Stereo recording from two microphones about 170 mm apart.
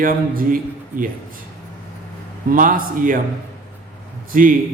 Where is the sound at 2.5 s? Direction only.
55° right (ahead or behind).